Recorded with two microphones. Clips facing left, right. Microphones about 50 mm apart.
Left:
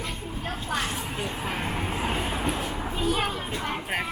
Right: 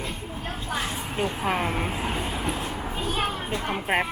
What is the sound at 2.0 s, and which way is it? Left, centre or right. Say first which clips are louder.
Train: left 1 dB; centre.